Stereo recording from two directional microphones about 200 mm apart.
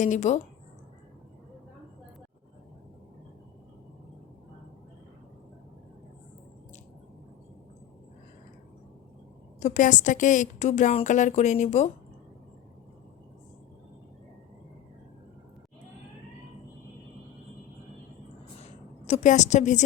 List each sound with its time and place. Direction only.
0.0 s a woman's voice: 35° left (ahead or behind)
9.6 s a woman's voice: 40° left (ahead or behind)
18.6 s a sound: 35° left (ahead or behind)